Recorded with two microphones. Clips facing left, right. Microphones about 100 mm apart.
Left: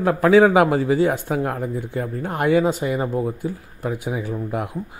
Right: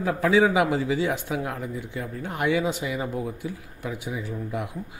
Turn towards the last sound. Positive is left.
turn(degrees=50)  # may be behind; listen again after turning